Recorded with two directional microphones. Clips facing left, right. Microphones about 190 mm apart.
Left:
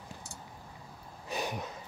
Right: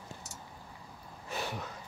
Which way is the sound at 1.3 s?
15° left (ahead or behind).